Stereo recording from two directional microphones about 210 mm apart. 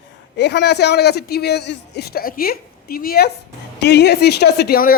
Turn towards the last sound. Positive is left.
turn(degrees=45)  # may be behind; listen again after turning